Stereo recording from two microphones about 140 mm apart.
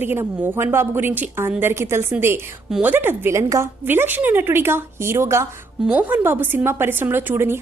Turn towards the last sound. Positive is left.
turn(degrees=-15)  # may be behind; listen again after turning